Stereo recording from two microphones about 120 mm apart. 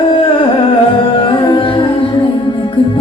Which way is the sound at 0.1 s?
45° left (ahead or behind).